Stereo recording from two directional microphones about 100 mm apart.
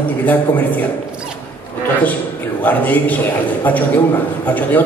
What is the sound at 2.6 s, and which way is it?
Speech, 15° left (ahead or behind).